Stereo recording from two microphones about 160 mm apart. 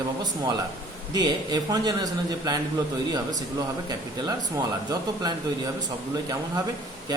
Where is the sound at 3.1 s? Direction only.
25° right (ahead or behind).